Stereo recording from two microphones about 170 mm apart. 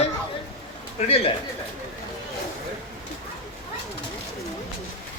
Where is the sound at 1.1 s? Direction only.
35° left (ahead or behind).